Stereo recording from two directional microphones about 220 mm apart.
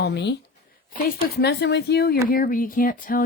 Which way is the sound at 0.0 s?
50° left (ahead or behind).